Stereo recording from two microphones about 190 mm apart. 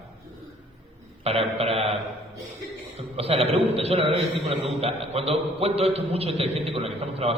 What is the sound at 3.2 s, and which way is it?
A man's voice, 30° right (ahead or behind).